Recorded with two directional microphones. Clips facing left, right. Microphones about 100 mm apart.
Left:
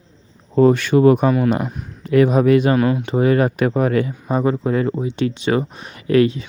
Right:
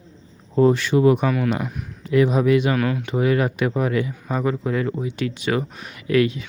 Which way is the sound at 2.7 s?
25° left (ahead or behind).